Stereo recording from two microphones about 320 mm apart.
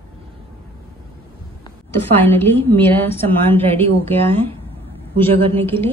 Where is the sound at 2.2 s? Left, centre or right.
Centre.